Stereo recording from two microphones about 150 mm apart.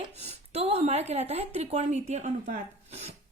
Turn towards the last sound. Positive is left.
turn(degrees=-45)  # may be behind; listen again after turning